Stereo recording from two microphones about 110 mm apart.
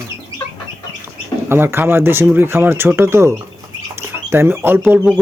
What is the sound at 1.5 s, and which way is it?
Speech, 20° right (ahead or behind).